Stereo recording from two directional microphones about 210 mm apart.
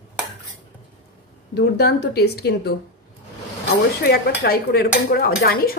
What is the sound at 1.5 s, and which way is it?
Dishes, 50° left (ahead or behind).